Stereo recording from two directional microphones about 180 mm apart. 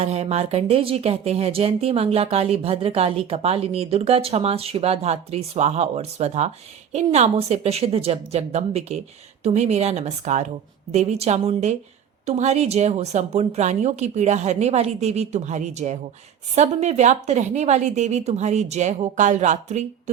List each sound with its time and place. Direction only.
0.0 s speech: 35° right (ahead or behind)